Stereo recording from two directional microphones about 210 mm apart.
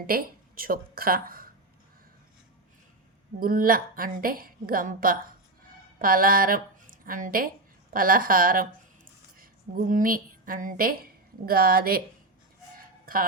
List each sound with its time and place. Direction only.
0.1 s speech: 45° right (ahead or behind)
3.4 s a woman's voice: 40° right (ahead or behind)
12.7 s a sound: 40° right (ahead or behind)